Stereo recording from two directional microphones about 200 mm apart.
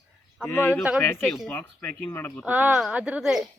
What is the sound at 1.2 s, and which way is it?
Speech, centre (ahead or behind).